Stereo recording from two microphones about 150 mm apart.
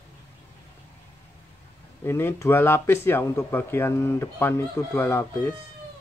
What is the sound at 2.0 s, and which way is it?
Speech, 15° left (ahead or behind).